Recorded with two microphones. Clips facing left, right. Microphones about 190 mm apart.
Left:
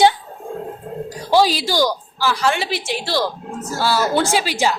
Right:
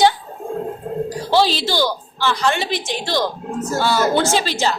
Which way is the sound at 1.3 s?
10° left (ahead or behind).